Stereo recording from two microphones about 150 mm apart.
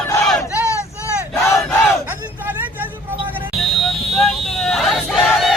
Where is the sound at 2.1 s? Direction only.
10° right (ahead or behind).